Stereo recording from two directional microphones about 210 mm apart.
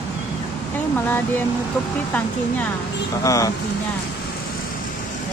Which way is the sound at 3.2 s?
15° left (ahead or behind).